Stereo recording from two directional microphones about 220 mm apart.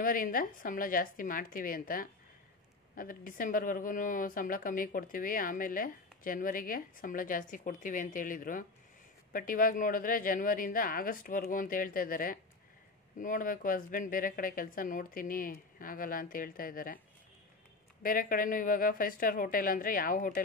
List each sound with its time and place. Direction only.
0.0 s speech: 40° left (ahead or behind)
18.0 s speech: 40° left (ahead or behind)